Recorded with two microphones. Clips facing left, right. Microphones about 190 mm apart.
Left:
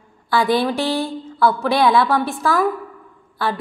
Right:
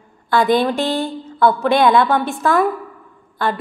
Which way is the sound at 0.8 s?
20° right (ahead or behind).